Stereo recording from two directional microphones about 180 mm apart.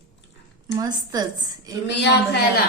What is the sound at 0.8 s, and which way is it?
Speech, 20° right (ahead or behind).